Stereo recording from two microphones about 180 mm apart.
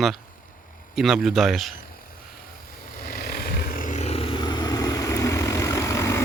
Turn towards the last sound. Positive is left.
turn(degrees=15)  # may be behind; listen again after turning